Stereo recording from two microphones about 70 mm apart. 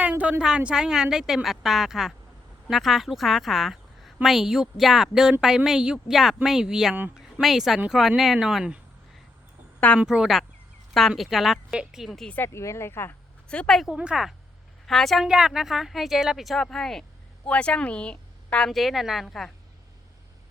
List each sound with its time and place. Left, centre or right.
0.0 s a woman's voice: right
10.0 s a woman's voice: centre
12.5 s speech: left
13.5 s a woman's voice: centre
13.9 s speech: centre
14.8 s a woman's voice: centre
18.7 s a woman's voice: centre